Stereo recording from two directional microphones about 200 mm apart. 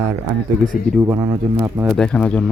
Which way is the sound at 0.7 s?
45° left (ahead or behind).